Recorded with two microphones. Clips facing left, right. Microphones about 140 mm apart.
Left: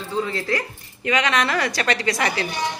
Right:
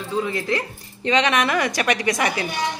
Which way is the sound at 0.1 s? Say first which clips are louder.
Right 1 dB; 15° right (ahead or behind).